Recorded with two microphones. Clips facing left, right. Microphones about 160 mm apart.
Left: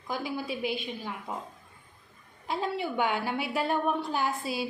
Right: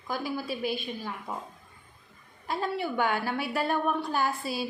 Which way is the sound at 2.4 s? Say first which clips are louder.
Even; 20° left (ahead or behind).